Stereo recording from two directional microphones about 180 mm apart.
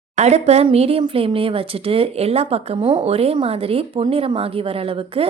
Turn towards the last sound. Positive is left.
turn(degrees=-30)  # may be behind; listen again after turning